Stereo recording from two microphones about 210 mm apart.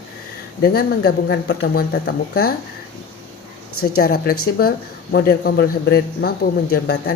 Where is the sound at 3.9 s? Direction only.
45° left (ahead or behind).